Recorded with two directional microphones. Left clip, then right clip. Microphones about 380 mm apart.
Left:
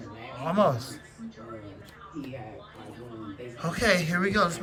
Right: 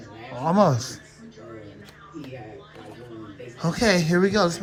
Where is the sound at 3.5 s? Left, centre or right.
Centre.